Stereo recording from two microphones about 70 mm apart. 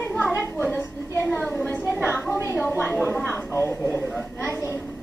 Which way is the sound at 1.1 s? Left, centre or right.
Left.